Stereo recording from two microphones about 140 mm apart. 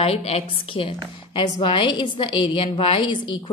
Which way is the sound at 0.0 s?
45° left (ahead or behind).